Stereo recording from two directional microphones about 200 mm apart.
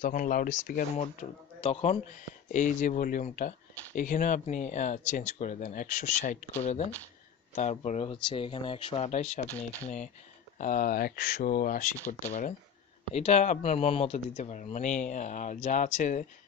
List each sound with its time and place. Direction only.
0.0 s speech: 45° left (ahead or behind)
1.6 s speech: 30° left (ahead or behind)
10.6 s speech: 45° left (ahead or behind)